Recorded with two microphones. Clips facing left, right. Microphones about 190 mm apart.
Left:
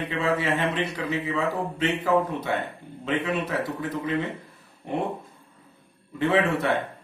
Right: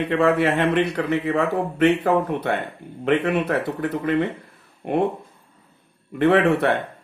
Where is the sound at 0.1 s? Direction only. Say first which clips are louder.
Right 7 dB; 60° right (ahead or behind).